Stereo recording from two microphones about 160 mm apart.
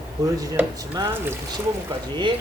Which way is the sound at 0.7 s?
25° right (ahead or behind).